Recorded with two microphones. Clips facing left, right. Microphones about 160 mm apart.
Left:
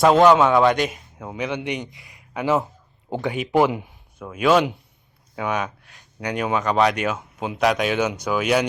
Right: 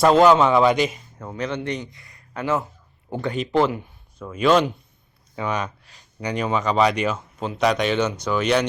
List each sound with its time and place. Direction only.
0.0 s speech: centre (ahead or behind)